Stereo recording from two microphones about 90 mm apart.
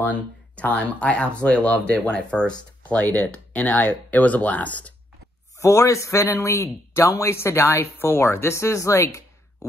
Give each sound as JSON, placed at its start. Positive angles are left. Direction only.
{"t": 0.0, "sound": "speech", "side_deg": 15}
{"t": 5.6, "sound": "speech", "side_deg": 35}